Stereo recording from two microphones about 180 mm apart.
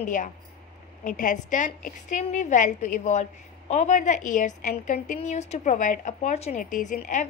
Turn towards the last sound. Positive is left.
turn(degrees=45)  # may be behind; listen again after turning